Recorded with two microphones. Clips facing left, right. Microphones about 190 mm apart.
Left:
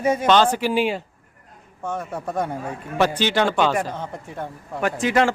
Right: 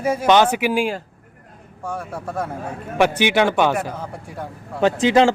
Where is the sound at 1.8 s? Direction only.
10° right (ahead or behind).